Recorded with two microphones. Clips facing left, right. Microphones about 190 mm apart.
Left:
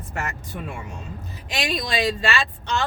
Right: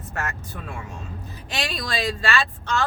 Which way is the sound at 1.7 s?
20° left (ahead or behind).